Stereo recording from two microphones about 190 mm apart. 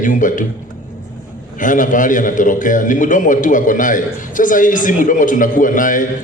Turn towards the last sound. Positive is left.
turn(degrees=45)  # may be behind; listen again after turning